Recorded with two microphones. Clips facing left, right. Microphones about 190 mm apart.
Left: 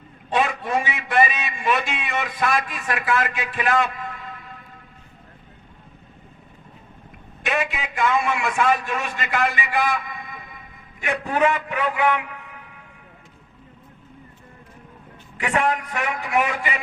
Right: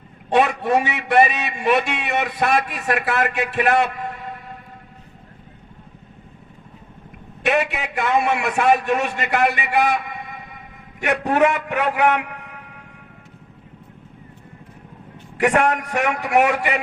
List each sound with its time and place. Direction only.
0.3 s a man's voice: 65° right (ahead or behind)
7.4 s a man's voice: 65° right (ahead or behind)
15.4 s a man's voice: 70° right (ahead or behind)